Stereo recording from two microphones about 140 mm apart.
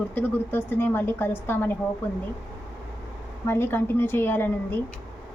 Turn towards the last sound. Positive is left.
turn(degrees=15)  # may be behind; listen again after turning